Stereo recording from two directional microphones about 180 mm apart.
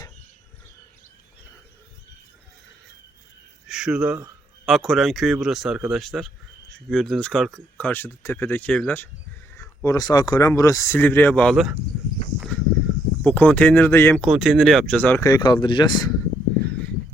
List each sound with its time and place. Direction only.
3.7 s speech: 5° right (ahead or behind)
9.6 s speech: 20° left (ahead or behind); by 11.8 s centre (ahead or behind)
12.4 s a sound: 5° left (ahead or behind)
13.2 s speech: 10° left (ahead or behind)
14.2 s speech: centre (ahead or behind)
15.2 s speech: 20° left (ahead or behind)